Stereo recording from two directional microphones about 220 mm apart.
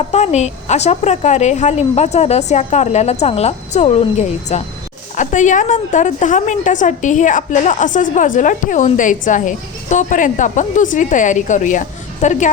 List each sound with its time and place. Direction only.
0.1 s a woman's voice: 30° left (ahead or behind)